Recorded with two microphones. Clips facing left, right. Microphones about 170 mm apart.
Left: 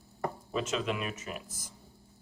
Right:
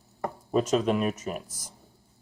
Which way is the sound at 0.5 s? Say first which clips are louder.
Right 10 dB; 40° right (ahead or behind).